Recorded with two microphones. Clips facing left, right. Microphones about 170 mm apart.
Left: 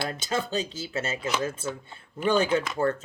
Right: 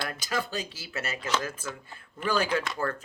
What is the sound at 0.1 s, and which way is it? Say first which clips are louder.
Speech: left 3 dB; 25° left (ahead or behind).